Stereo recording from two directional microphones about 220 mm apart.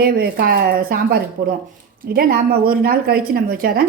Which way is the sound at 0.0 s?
45° right (ahead or behind).